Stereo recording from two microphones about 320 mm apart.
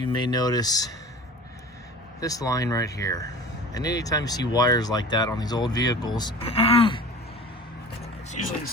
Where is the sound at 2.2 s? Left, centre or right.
Centre.